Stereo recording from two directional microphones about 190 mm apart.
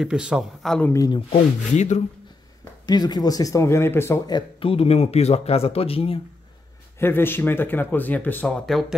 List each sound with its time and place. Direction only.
0.0 s speech: 5° right (ahead or behind)
0.9 s speech: 20° left (ahead or behind)
1.8 s speech: 40° left (ahead or behind)
2.9 s speech: 20° left (ahead or behind)
7.0 s speech: 10° left (ahead or behind)